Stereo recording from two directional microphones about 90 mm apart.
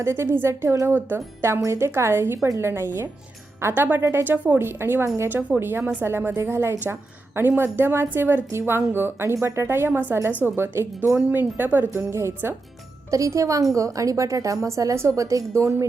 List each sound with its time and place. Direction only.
0.0 s speech: 30° right (ahead or behind)
11.9 s a woman's voice: 30° right (ahead or behind)